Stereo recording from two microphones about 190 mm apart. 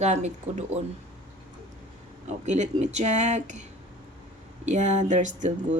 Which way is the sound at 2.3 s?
40° right (ahead or behind).